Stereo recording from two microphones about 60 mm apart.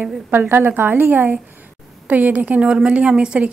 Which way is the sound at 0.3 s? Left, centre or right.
Right.